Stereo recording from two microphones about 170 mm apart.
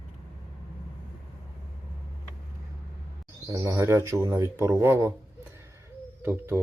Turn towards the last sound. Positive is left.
turn(degrees=-10)  # may be behind; listen again after turning